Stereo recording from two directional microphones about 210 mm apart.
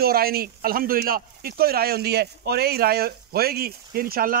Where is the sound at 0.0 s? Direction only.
45° right (ahead or behind).